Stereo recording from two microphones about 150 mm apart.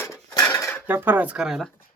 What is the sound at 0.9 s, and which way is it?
Speech, 15° right (ahead or behind).